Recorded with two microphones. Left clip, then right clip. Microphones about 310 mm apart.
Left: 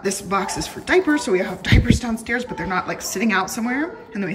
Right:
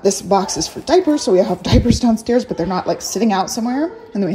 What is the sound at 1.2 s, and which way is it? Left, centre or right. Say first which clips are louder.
Speech: right 6 dB; centre.